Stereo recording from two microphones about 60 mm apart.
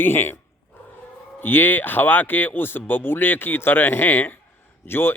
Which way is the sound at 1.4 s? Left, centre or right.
Left.